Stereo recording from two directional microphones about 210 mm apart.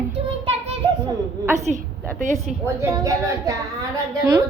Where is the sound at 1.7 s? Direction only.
35° right (ahead or behind).